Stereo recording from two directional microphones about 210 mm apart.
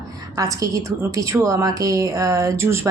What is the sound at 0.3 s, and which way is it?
A woman's voice, 15° right (ahead or behind).